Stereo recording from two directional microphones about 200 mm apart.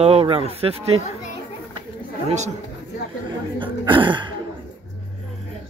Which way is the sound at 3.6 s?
25° right (ahead or behind).